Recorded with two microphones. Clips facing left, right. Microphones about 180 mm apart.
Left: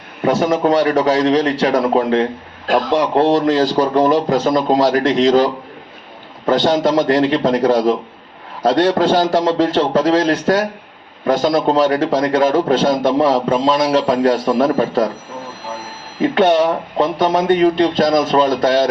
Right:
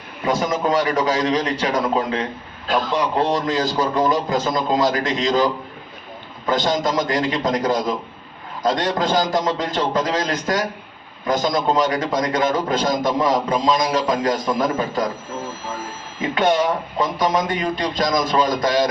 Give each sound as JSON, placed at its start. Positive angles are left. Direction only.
{"t": 0.3, "sound": "a man's voice", "side_deg": 65}
{"t": 6.5, "sound": "a man's voice", "side_deg": 70}
{"t": 16.2, "sound": "a man's voice", "side_deg": 70}